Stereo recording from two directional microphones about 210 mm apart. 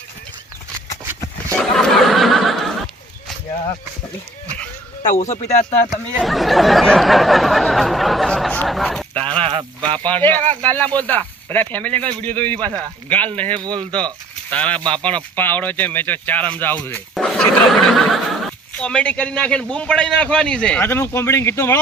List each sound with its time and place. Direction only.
1.5 s snicker: 5° left (ahead or behind)
5.0 s speech: 35° left (ahead or behind)
5.9 s speech: centre (ahead or behind)
9.4 s speech: 25° right (ahead or behind)
10.0 s speech: 10° left (ahead or behind)
13.6 s speech: 20° right (ahead or behind)
14.5 s speech: 5° left (ahead or behind)